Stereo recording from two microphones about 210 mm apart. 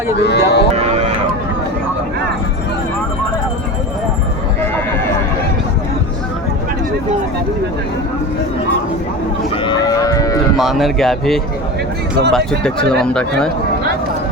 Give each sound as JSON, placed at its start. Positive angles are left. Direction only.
{"t": 0.2, "sound": "speech", "side_deg": 55}
{"t": 0.8, "sound": "vehicle", "side_deg": -30}
{"t": 9.6, "sound": "speech", "side_deg": 20}
{"t": 10.6, "sound": "speech", "side_deg": 0}